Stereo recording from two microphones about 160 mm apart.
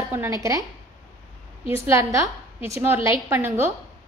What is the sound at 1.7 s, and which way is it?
A woman's voice, 15° right (ahead or behind).